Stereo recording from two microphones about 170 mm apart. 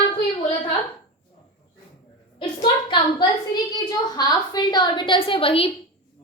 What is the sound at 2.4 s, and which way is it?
A woman's voice, 30° left (ahead or behind).